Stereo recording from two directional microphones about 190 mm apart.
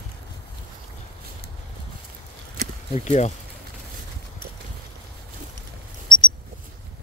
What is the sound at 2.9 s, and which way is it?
Speech, 35° left (ahead or behind).